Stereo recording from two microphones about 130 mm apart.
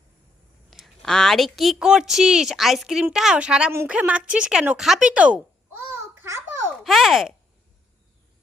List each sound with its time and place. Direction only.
0.7 s a woman's voice: centre (ahead or behind)
3.7 s a woman's voice: 20° right (ahead or behind)
3.9 s speech: 10° right (ahead or behind)
5.0 s babbling: 10° right (ahead or behind)
6.8 s a woman's voice: centre (ahead or behind)